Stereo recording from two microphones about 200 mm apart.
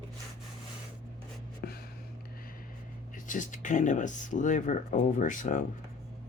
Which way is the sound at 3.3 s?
40° left (ahead or behind).